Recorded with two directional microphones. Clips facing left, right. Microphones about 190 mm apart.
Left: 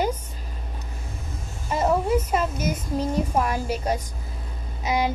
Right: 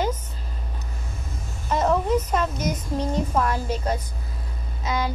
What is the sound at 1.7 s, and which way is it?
A woman's voice, 10° left (ahead or behind).